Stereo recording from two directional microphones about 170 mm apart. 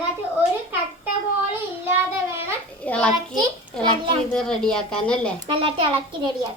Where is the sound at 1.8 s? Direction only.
15° right (ahead or behind).